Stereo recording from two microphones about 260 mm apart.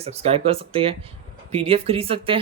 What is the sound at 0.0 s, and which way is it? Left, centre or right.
Speech, right.